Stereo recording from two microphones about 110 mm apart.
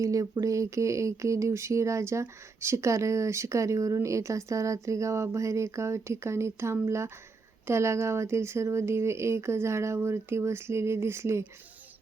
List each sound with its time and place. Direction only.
0.0 s speech: 30° right (ahead or behind)